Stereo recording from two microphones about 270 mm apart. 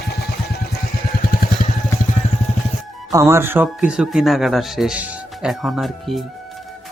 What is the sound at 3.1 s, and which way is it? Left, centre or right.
Speech, centre.